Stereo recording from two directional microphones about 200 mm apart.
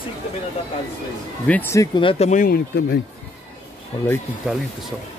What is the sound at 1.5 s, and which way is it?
Speech, 10° left (ahead or behind).